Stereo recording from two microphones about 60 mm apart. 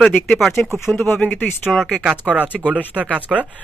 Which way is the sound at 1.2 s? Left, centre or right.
Left.